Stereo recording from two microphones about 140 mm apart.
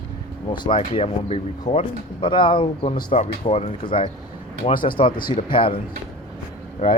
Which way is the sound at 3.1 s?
50° left (ahead or behind).